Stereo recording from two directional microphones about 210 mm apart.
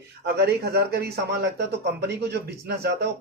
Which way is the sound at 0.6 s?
50° right (ahead or behind).